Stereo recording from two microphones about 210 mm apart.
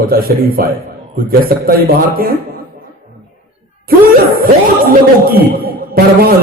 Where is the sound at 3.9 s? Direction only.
45° right (ahead or behind).